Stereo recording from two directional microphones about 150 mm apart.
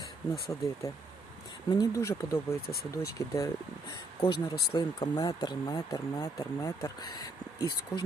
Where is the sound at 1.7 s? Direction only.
25° left (ahead or behind).